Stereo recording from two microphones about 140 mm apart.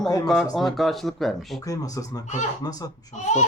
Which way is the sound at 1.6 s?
25° left (ahead or behind).